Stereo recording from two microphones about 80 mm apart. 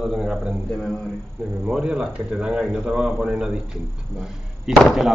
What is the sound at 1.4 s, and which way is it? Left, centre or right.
Speech, centre.